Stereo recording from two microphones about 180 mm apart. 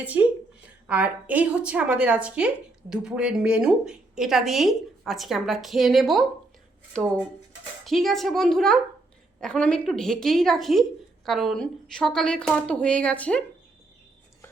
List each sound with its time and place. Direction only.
0.0 s a woman's voice: 10° right (ahead or behind); by 13.4 s 5° left (ahead or behind)